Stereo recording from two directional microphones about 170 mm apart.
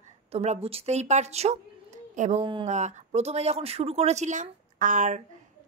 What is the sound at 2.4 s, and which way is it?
Speech, 30° right (ahead or behind).